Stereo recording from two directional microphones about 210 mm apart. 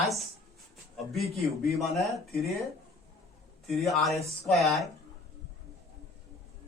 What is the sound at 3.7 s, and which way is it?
Speech, centre (ahead or behind).